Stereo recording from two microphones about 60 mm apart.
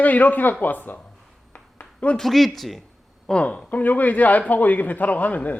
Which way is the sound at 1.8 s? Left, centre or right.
Left.